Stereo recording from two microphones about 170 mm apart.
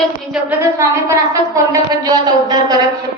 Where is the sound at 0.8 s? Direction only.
20° right (ahead or behind).